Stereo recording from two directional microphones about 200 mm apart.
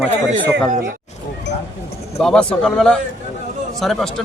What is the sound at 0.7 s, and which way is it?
Speech, 40° right (ahead or behind).